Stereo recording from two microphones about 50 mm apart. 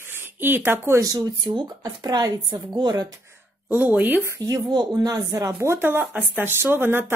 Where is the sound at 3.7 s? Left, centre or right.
Right.